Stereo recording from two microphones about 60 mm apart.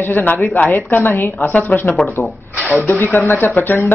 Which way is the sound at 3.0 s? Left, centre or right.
Left.